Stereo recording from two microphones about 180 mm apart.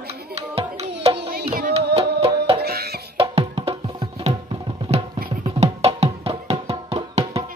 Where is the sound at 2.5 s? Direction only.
60° right (ahead or behind).